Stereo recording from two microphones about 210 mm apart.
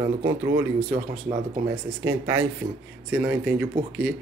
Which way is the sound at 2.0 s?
10° right (ahead or behind).